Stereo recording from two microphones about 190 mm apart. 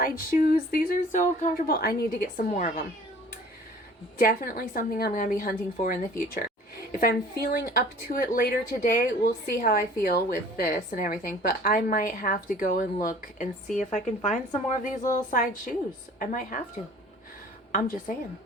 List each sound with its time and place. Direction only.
0.0 s a woman's voice: 45° left (ahead or behind)
2.5 s speech: 40° left (ahead or behind)
4.2 s a woman's voice: 45° left (ahead or behind)
7.6 s a woman's voice: 50° left (ahead or behind)
17.7 s a woman's voice: 45° left (ahead or behind)